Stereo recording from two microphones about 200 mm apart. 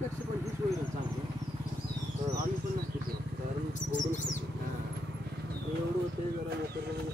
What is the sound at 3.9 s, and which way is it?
Rodents, 40° left (ahead or behind).